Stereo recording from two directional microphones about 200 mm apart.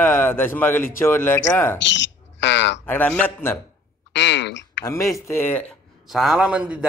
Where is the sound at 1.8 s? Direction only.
65° left (ahead or behind).